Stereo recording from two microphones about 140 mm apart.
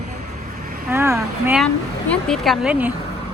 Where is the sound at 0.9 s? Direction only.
20° right (ahead or behind).